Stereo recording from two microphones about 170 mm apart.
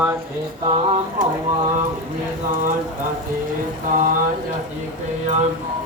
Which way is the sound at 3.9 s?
50° right (ahead or behind).